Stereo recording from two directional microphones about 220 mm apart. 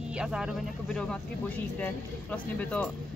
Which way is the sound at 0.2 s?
5° right (ahead or behind).